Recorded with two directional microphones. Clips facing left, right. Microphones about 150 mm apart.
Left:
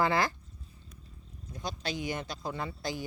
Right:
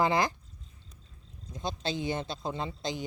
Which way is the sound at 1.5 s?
25° right (ahead or behind).